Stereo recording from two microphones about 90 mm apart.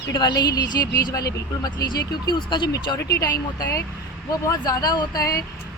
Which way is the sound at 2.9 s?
40° left (ahead or behind).